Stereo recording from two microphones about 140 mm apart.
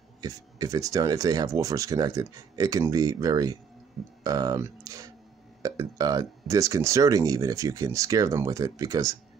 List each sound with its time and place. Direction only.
0.2 s speech: 25° right (ahead or behind)